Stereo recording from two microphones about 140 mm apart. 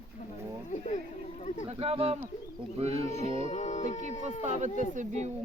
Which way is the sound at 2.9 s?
60° left (ahead or behind).